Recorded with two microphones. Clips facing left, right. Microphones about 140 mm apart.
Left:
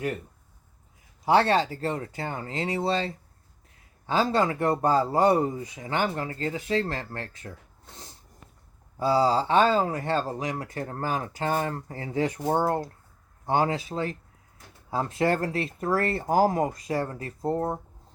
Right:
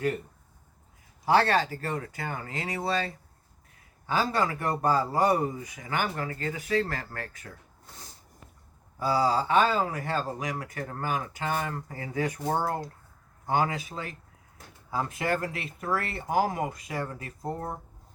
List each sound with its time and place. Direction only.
1.2 s speech: 20° left (ahead or behind)